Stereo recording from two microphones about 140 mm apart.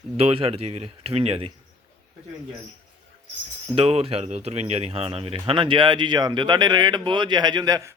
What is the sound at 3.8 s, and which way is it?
Speech, 45° right (ahead or behind).